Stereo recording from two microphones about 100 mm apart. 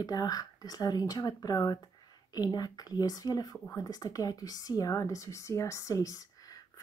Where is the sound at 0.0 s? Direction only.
40° left (ahead or behind).